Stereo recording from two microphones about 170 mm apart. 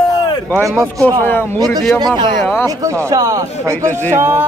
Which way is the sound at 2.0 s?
25° right (ahead or behind).